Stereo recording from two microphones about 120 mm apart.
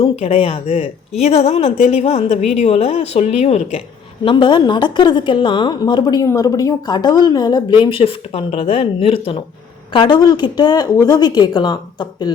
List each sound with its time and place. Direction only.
0.0 s a woman's voice: 55° left (ahead or behind)
4.2 s a woman's voice: 40° left (ahead or behind)
9.9 s a woman's voice: 40° left (ahead or behind)